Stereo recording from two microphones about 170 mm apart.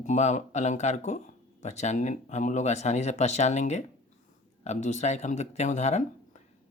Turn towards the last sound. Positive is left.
turn(degrees=40)  # may be behind; listen again after turning